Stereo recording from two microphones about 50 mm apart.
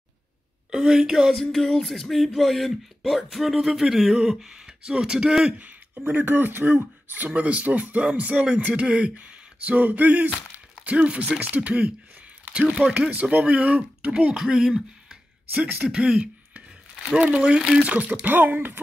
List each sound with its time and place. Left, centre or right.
0.7 s a woman's voice: centre
1.3 s a sound: centre
5.9 s speech: right
10.8 s speech: right
15.5 s speech: right